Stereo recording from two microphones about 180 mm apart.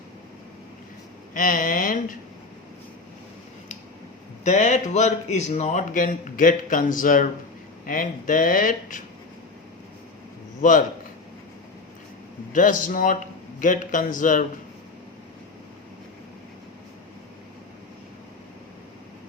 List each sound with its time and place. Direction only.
1.3 s speech: 50° left (ahead or behind)
4.4 s speech: 40° left (ahead or behind)
10.6 s a man's voice: 45° left (ahead or behind)
12.5 s speech: 50° left (ahead or behind)